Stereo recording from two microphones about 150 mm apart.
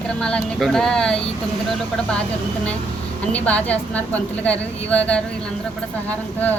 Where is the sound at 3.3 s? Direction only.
10° left (ahead or behind).